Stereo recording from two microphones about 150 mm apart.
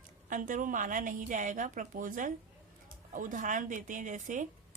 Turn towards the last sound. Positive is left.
turn(degrees=-55)  # may be behind; listen again after turning